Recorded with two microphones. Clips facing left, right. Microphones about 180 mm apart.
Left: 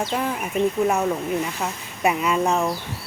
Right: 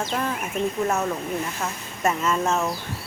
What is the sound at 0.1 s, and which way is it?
Speech, 10° left (ahead or behind).